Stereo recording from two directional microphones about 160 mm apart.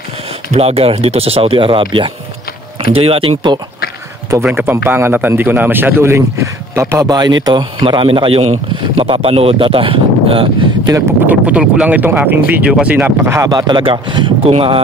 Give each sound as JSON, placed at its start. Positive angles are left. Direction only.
{"t": 0.5, "sound": "speech", "side_deg": -40}
{"t": 4.3, "sound": "a man's voice", "side_deg": -15}
{"t": 10.9, "sound": "speech", "side_deg": -15}